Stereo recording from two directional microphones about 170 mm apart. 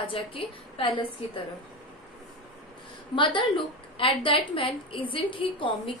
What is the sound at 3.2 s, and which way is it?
A woman's voice, 30° left (ahead or behind).